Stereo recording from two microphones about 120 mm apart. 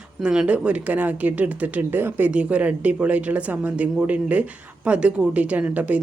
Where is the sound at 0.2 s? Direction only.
5° right (ahead or behind).